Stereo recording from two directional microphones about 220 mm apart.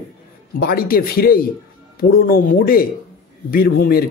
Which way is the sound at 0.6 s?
45° left (ahead or behind).